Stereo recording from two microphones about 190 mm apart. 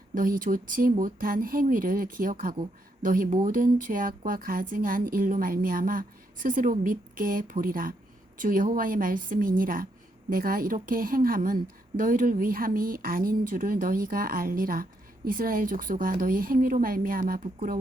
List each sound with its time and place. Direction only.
0.1 s a woman's voice: 45° right (ahead or behind)